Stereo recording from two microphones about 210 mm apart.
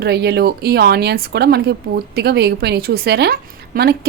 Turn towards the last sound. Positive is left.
turn(degrees=-45)  # may be behind; listen again after turning